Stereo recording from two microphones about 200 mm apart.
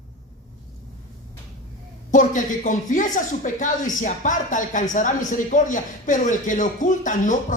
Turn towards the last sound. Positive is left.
turn(degrees=40)  # may be behind; listen again after turning